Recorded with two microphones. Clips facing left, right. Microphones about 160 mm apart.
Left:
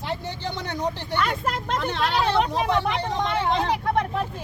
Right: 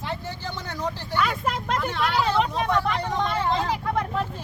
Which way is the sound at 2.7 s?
20° left (ahead or behind).